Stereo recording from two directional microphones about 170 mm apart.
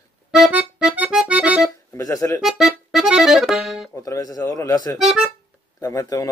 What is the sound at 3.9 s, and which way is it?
Speech, 20° left (ahead or behind).